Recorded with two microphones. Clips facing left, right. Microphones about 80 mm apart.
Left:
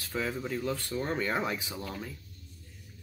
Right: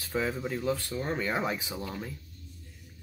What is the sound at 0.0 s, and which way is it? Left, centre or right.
Speech, centre.